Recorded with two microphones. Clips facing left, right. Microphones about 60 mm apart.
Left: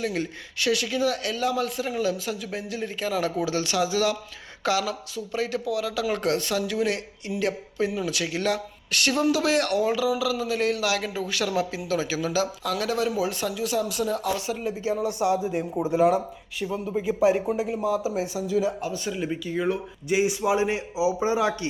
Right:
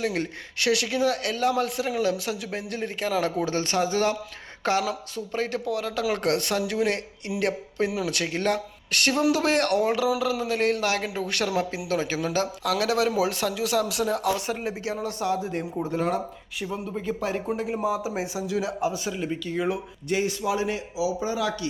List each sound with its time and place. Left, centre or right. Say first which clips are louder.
0.0 s a man's voice: right 1 dB; right
7.9 s speech: even; right
8.1 s a man's voice: right 1 dB; right
12.7 s speech: right 3 dB; right
13.1 s speech: right 2 dB; right
14.0 s a man's voice: right 1 dB; right
14.8 s speech: left 4 dB; centre
18.1 s speech: left 2 dB; centre
18.4 s speech: left 1 dB; centre
20.1 s a man's voice: left 3 dB; centre